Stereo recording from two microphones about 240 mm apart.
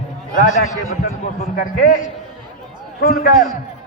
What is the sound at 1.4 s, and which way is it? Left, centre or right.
Speech, left.